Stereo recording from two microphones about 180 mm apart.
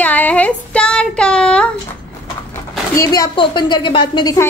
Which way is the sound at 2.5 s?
20° left (ahead or behind).